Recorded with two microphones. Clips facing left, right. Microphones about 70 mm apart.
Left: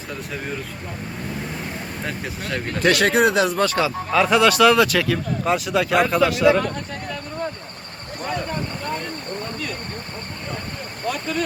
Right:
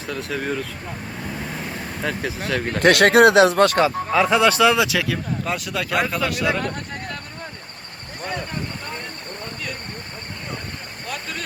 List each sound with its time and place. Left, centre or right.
0.1 s speech: right
2.0 s speech: right
4.1 s speech: right; by 7.2 s centre
8.2 s speech: centre
11.1 s speech: centre